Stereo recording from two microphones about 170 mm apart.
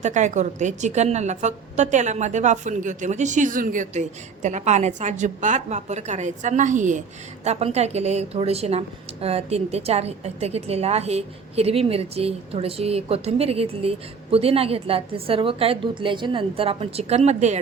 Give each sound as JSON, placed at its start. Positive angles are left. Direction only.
{"t": 0.0, "sound": "a woman's voice", "side_deg": -45}